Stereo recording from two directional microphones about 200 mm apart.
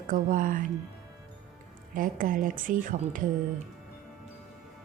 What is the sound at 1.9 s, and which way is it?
A woman's voice, 45° right (ahead or behind).